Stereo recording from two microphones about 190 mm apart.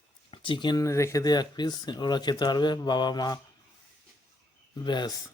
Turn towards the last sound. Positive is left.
turn(degrees=25)  # may be behind; listen again after turning